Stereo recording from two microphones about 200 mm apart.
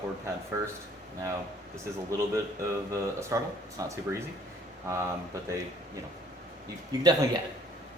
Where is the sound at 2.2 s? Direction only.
15° right (ahead or behind).